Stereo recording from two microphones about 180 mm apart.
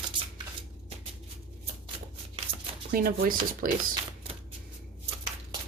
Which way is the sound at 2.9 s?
55° right (ahead or behind).